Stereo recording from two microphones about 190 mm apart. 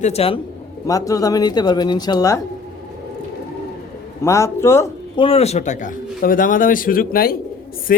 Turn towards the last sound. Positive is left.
turn(degrees=50)  # may be behind; listen again after turning